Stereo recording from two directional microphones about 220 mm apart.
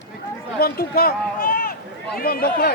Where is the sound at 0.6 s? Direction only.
45° left (ahead or behind).